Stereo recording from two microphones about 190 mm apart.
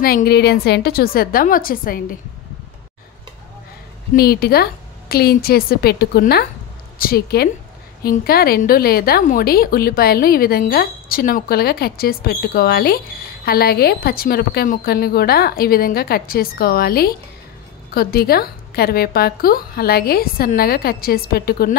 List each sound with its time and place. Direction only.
0.0 s a woman's voice: 50° left (ahead or behind)
4.1 s a woman's voice: 55° left (ahead or behind)